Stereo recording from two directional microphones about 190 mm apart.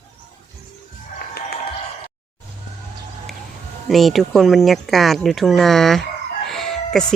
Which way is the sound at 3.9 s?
Centre (ahead or behind).